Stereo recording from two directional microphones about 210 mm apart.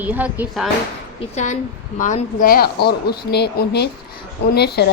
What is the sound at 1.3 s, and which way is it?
Speech, 35° left (ahead or behind).